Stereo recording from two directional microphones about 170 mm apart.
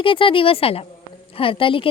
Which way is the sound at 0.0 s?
30° left (ahead or behind).